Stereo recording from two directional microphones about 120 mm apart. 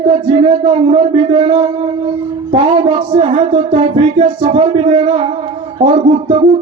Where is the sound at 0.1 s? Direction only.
50° right (ahead or behind).